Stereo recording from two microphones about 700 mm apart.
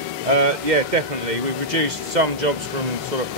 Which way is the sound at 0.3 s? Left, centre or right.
Right.